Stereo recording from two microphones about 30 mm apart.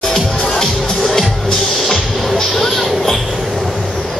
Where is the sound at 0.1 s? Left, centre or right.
Left.